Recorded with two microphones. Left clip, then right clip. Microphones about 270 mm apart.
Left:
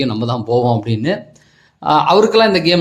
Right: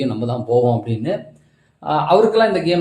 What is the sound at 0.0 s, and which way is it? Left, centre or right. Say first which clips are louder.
Speech: left 3 dB; left.